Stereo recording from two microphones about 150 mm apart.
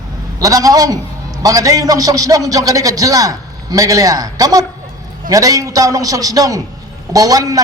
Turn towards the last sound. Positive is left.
turn(degrees=-25)  # may be behind; listen again after turning